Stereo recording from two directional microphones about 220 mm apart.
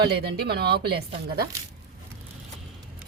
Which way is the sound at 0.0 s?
45° right (ahead or behind).